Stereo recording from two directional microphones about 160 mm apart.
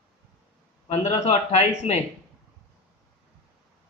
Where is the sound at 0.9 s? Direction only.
45° left (ahead or behind).